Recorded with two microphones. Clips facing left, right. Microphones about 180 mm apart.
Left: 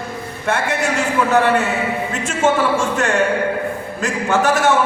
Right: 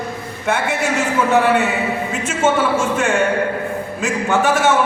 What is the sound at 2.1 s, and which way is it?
A man's voice, 5° right (ahead or behind).